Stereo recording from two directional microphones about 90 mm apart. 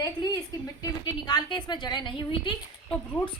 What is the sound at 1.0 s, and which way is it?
A woman's voice, 55° left (ahead or behind).